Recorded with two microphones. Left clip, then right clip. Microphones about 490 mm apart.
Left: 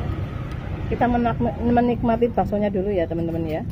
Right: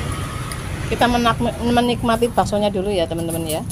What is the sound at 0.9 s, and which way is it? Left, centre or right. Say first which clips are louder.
Speech: right 4 dB; left.